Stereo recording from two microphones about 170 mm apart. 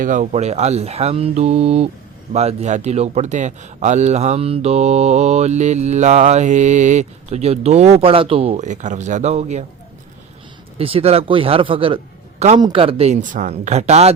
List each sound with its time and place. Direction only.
0.0 s speech: 50° right (ahead or behind)
10.8 s speech: 35° right (ahead or behind)